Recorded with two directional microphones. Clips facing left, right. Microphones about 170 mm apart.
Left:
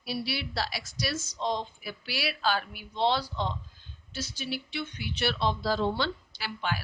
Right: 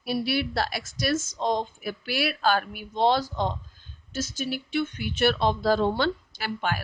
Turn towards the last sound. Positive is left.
turn(degrees=-50)  # may be behind; listen again after turning